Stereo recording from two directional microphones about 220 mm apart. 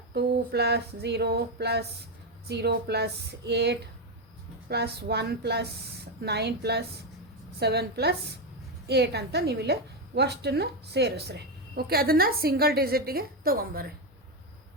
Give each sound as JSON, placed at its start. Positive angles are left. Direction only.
{"t": 0.1, "sound": "a woman's voice", "side_deg": -50}